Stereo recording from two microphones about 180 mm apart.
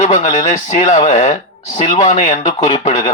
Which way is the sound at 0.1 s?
30° left (ahead or behind).